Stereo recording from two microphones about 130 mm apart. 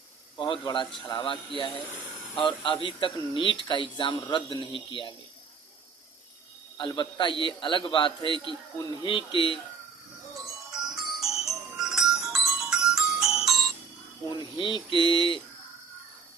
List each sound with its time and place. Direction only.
0.3 s speech: 40° left (ahead or behind)
6.7 s speech: 40° left (ahead or behind)
10.4 s music: 5° right (ahead or behind)
14.3 s speech: 35° left (ahead or behind)